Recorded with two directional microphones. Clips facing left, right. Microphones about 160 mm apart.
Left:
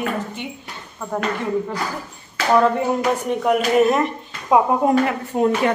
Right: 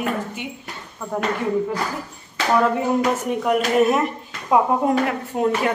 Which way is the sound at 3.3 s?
Centre (ahead or behind).